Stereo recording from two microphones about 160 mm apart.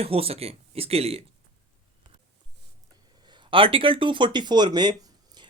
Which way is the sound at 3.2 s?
30° right (ahead or behind).